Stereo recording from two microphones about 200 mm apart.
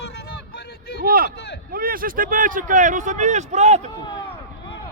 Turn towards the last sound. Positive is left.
turn(degrees=-35)  # may be behind; listen again after turning